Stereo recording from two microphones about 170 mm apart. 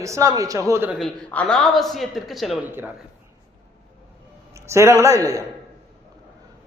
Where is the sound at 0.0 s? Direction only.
20° right (ahead or behind).